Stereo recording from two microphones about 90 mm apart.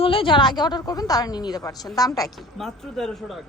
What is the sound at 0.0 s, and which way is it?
A woman's voice, 85° left.